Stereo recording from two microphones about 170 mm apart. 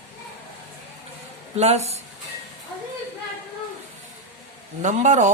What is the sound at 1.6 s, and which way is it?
Speech, 40° right (ahead or behind).